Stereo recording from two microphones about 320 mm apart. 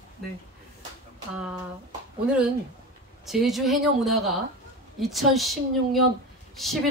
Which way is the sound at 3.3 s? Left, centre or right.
Centre.